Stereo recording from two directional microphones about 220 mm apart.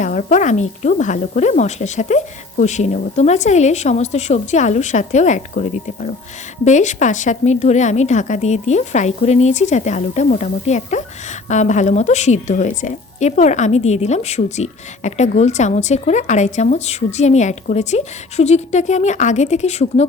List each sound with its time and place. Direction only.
0.0 s a woman's voice: 35° left (ahead or behind)